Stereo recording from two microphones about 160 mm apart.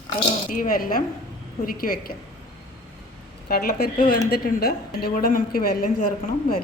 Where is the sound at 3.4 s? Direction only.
70° left (ahead or behind).